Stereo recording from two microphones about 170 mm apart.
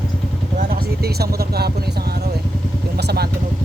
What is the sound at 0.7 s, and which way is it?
Speech, 65° right (ahead or behind).